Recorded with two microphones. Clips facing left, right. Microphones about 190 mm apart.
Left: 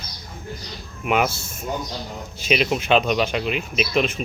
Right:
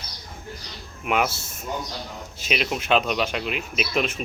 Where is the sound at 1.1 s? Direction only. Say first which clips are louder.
Left 3 dB; centre (ahead or behind).